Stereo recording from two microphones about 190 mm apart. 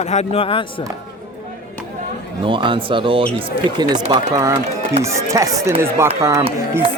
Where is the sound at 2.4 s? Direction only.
25° right (ahead or behind).